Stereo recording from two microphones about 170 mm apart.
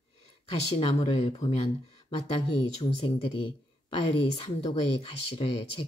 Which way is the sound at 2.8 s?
30° left (ahead or behind).